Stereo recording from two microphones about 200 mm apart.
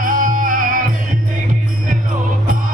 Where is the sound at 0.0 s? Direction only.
40° right (ahead or behind).